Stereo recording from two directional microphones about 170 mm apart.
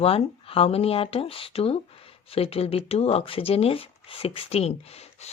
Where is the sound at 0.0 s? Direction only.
35° left (ahead or behind).